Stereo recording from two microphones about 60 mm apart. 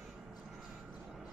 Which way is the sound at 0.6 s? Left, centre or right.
Centre.